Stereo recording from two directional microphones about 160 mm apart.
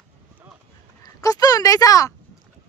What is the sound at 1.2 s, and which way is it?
Speech, 20° left (ahead or behind).